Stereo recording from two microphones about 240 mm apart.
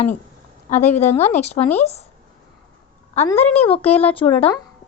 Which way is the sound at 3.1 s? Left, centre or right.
Left.